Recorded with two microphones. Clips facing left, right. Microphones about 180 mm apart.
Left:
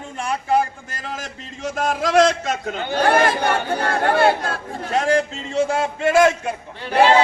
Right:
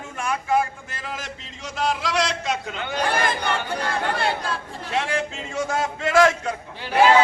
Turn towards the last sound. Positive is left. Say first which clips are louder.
# left 2 dB
turn(degrees=30)  # may be behind; listen again after turning